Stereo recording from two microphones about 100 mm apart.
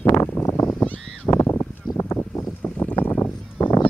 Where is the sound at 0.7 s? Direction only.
15° left (ahead or behind).